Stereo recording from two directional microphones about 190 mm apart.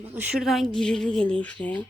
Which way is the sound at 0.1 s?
10° right (ahead or behind).